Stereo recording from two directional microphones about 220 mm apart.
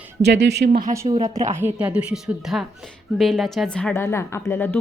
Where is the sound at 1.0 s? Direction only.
30° right (ahead or behind).